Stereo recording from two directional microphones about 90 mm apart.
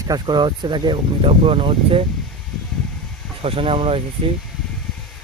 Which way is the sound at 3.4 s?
90° right.